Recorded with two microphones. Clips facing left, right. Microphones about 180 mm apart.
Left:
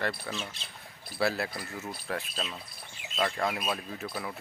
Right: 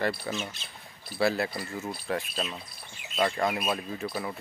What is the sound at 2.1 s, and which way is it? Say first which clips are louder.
Speech: right 4 dB; 10° right (ahead or behind).